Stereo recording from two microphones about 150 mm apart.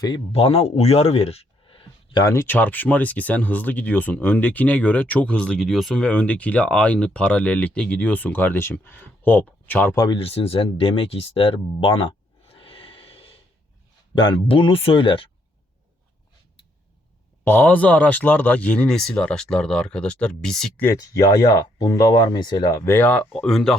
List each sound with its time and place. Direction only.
0.3 s speech: 40° left (ahead or behind)
2.2 s speech: 20° left (ahead or behind)
9.9 s speech: 25° left (ahead or behind)
10.2 s speech: 40° left (ahead or behind)
17.4 s speech: 10° left (ahead or behind)
20.8 s speech: 20° left (ahead or behind); by 23.7 s 5° left (ahead or behind)